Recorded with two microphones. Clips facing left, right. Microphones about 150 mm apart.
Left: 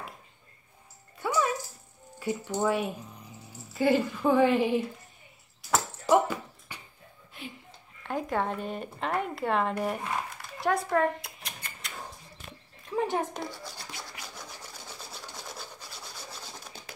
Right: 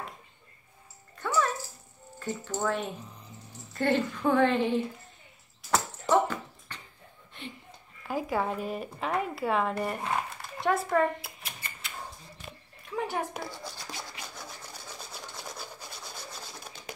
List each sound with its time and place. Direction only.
1.2 s dog: 10° left (ahead or behind)
2.1 s speech: 10° left (ahead or behind)
5.6 s a sound: 5° left (ahead or behind)
8.0 s speech: 5° right (ahead or behind)
10.6 s rodents: centre (ahead or behind)
12.9 s a sound: 20° left (ahead or behind)